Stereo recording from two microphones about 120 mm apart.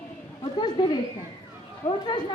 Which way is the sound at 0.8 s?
40° left (ahead or behind).